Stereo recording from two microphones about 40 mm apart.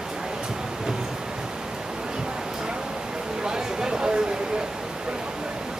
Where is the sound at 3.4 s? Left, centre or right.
Centre.